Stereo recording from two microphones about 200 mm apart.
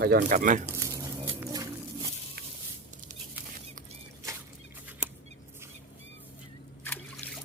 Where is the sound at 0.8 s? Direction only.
15° right (ahead or behind).